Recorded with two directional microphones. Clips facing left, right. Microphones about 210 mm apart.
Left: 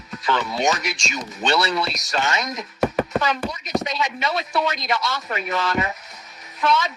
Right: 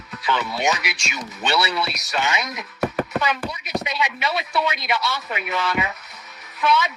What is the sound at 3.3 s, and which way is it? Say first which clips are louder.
A man's voice: left 2 dB; 5° right (ahead or behind).